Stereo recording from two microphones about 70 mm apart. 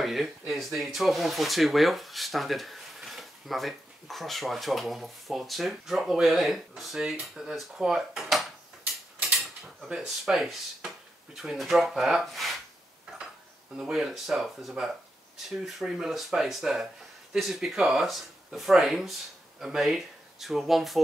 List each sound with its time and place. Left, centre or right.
0.0 s speech: centre
9.8 s speech: centre
13.7 s speech: centre